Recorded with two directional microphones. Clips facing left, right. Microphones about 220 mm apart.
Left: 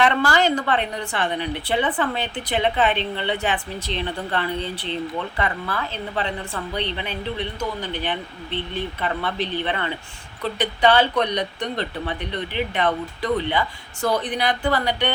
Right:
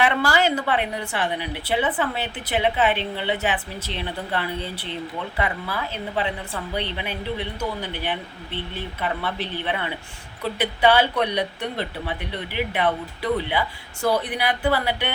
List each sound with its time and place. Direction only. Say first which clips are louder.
0.0 s a woman's voice: left 1 dB; 10° right (ahead or behind)